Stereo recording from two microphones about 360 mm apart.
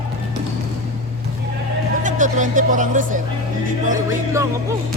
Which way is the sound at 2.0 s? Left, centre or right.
Right.